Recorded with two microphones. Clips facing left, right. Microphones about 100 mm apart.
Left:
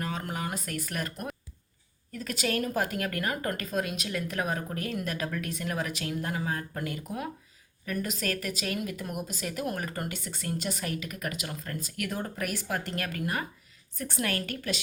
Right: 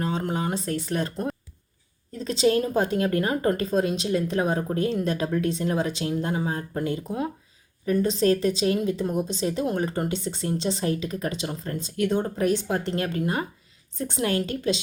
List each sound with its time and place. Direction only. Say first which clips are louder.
0.0 s a woman's voice: right 7 dB; 25° right (ahead or behind)